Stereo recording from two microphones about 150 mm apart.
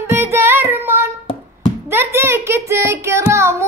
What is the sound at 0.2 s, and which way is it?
Child singing, 15° right (ahead or behind).